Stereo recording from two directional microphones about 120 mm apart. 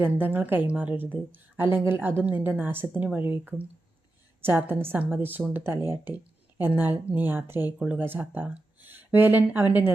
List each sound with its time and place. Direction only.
0.0 s a woman's voice: 15° right (ahead or behind)